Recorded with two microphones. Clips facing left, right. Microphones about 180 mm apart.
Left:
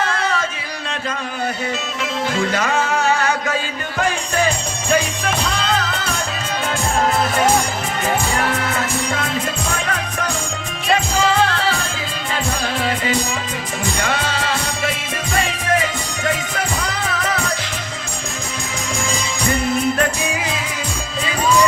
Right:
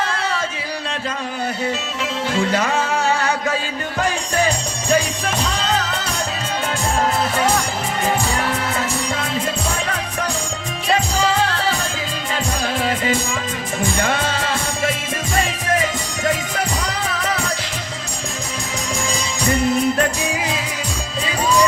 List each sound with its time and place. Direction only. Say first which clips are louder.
0.0 s music: left 2 dB; 35° right (ahead or behind)
2.3 s music: right 1 dB; 30° right (ahead or behind)
4.9 s music: even; 40° right (ahead or behind)
11.2 s music: left 2 dB; 40° right (ahead or behind)
12.6 s music: right 3 dB; 45° right (ahead or behind)
16.2 s music: right 1 dB; 35° right (ahead or behind)
19.1 s music: right 1 dB; 35° right (ahead or behind)